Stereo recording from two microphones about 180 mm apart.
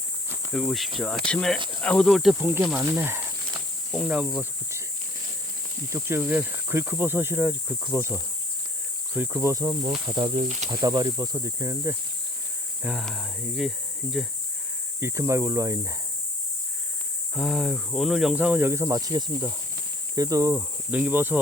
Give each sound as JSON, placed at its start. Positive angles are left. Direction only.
{"t": 0.5, "sound": "speech", "side_deg": 0}
{"t": 2.8, "sound": "snake", "side_deg": -15}
{"t": 3.9, "sound": "speech", "side_deg": -5}
{"t": 5.9, "sound": "speech", "side_deg": -15}
{"t": 12.8, "sound": "speech", "side_deg": -5}
{"t": 15.0, "sound": "speech", "side_deg": -15}
{"t": 17.3, "sound": "speech", "side_deg": 0}